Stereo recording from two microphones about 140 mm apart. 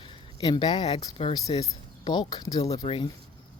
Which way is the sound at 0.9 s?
50° left (ahead or behind).